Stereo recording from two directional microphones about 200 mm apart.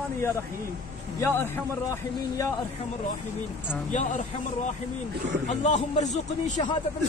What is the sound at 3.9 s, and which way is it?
Speech, 40° left (ahead or behind).